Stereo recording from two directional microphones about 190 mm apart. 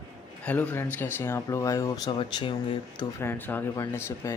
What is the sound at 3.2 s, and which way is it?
Speech, 10° left (ahead or behind).